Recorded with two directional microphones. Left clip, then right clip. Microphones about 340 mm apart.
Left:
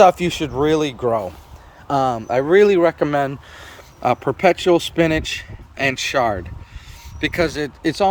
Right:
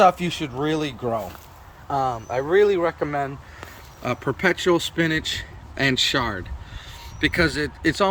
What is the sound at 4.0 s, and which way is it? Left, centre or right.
Speech, centre.